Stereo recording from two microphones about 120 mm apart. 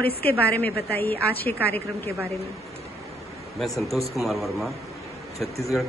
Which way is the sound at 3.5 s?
Centre (ahead or behind).